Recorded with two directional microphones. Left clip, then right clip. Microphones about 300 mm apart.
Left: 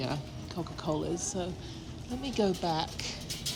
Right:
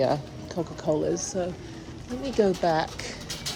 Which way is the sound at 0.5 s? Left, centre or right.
Left.